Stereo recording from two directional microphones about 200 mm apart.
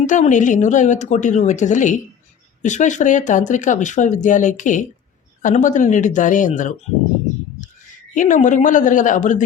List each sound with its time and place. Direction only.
0.0 s speech: 40° left (ahead or behind)
8.1 s speech: 40° left (ahead or behind)